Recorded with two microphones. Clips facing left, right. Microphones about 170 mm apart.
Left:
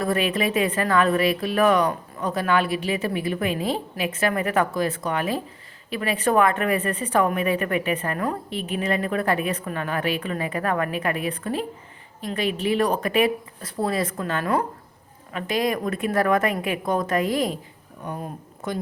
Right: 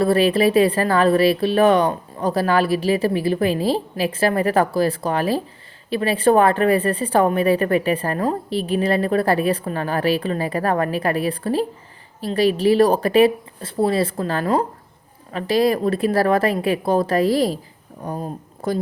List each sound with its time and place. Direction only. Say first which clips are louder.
0.0 s speech: right 7 dB; 30° right (ahead or behind)